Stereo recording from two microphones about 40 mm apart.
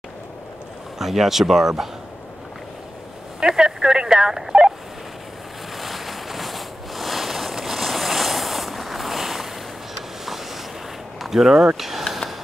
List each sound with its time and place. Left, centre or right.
0.9 s speech: centre
3.3 s telephone dialing: centre
5.8 s a sound: centre
10.2 s vehicle: centre
11.1 s speech: centre